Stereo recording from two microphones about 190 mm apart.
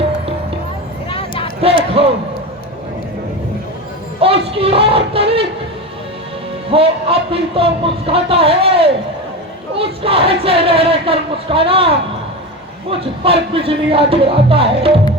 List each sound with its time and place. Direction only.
1.6 s basketball bounce: 30° right (ahead or behind)
4.2 s music: 30° right (ahead or behind)
6.7 s a sound: 30° right (ahead or behind)
12.9 s music: 30° right (ahead or behind)